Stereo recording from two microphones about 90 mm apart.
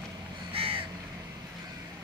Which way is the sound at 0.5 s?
90° right.